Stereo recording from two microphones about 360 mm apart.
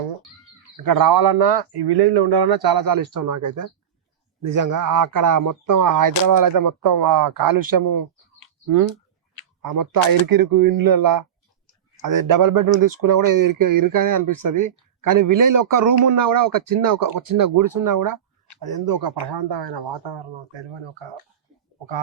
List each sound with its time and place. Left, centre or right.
0.8 s speech: right
18.7 s speech: right